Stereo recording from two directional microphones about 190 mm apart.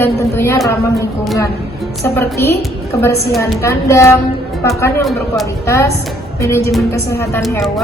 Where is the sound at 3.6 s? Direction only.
15° left (ahead or behind).